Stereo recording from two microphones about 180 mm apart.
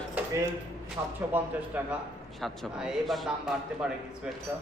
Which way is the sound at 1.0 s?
20° right (ahead or behind).